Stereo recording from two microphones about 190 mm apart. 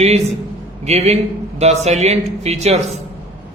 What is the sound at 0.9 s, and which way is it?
A man's voice, 35° right (ahead or behind).